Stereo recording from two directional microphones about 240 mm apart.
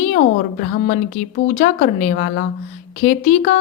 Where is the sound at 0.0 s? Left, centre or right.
Left.